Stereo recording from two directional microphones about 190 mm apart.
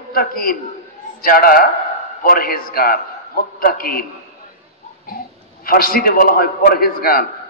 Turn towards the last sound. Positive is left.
turn(degrees=50)  # may be behind; listen again after turning